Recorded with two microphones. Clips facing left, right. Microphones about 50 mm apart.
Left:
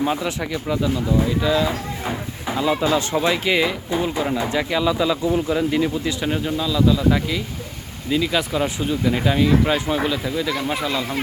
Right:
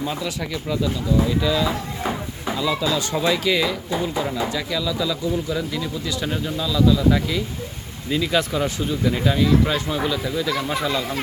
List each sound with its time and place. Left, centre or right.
0.0 s speech: left
0.5 s speech: centre
2.6 s speech: left
6.2 s speech: centre